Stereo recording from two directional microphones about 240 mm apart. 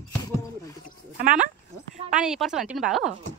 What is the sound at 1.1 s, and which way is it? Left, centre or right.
Speech, right.